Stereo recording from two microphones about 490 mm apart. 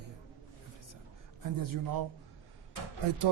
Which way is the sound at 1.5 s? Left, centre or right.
Right.